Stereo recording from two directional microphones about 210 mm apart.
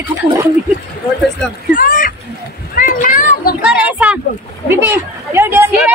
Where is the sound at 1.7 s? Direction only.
40° left (ahead or behind).